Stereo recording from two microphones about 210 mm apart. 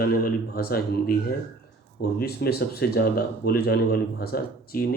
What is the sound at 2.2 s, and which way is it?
Speech, 50° left (ahead or behind).